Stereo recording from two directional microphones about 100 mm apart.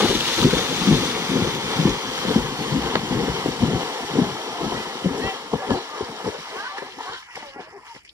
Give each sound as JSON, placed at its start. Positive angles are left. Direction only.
{"t": 0.0, "sound": "boat", "side_deg": -20}
{"t": 4.6, "sound": "vehicle", "side_deg": -30}